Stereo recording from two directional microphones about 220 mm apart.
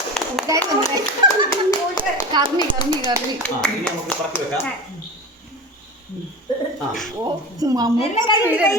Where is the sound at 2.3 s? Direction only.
20° right (ahead or behind).